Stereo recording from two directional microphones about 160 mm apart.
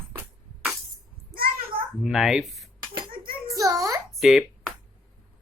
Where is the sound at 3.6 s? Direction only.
20° right (ahead or behind).